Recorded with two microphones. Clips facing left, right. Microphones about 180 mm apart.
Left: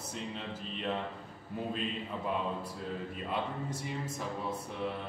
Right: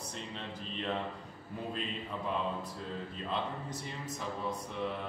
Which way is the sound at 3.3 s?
10° left (ahead or behind).